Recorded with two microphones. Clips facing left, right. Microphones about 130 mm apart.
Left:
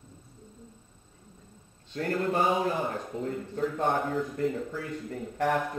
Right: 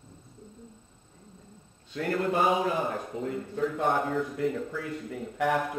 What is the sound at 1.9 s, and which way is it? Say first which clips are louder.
Speech: right 1 dB; 40° left (ahead or behind).